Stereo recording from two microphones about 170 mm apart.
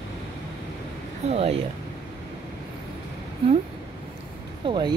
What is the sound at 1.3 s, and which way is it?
Speech, 35° right (ahead or behind).